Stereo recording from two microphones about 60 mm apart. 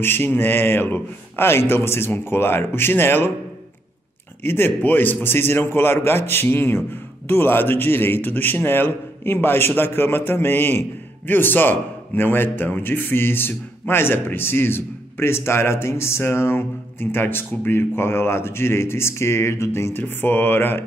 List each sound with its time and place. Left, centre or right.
0.0 s a man's voice: left
4.4 s a man's voice: left
19.9 s a man's voice: left